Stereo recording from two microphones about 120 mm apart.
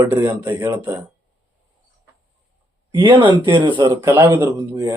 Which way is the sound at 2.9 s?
45° right (ahead or behind).